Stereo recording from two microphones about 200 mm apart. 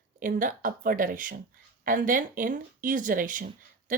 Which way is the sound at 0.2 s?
40° right (ahead or behind).